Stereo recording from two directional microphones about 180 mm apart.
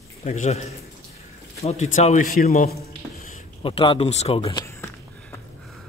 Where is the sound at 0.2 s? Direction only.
35° left (ahead or behind).